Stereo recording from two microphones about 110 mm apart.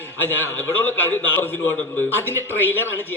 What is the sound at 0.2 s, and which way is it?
A man's voice, 20° left (ahead or behind).